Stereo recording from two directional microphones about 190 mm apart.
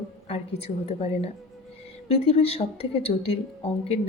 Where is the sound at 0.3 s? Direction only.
35° left (ahead or behind).